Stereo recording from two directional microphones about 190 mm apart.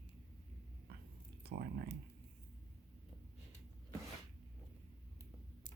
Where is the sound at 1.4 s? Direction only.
50° right (ahead or behind).